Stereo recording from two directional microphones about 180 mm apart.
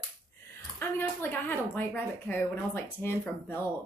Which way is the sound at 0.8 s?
10° left (ahead or behind).